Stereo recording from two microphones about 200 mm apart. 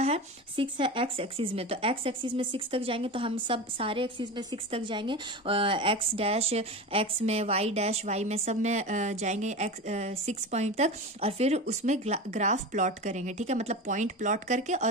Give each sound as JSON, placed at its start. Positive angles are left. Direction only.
{"t": 0.0, "sound": "speech", "side_deg": -30}